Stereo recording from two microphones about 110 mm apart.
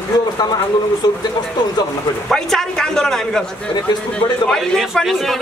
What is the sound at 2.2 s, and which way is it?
A man's voice, 5° left (ahead or behind).